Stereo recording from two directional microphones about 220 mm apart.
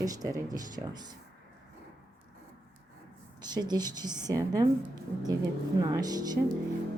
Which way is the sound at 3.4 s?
20° right (ahead or behind).